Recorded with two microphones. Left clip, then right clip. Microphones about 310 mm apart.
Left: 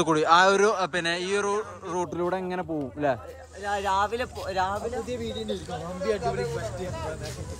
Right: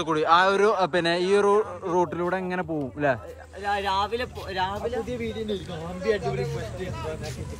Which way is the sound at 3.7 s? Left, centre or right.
Centre.